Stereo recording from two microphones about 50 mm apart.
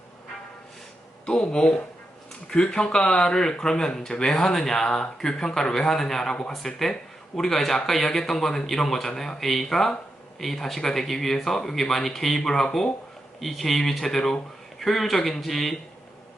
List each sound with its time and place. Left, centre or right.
1.2 s speech: centre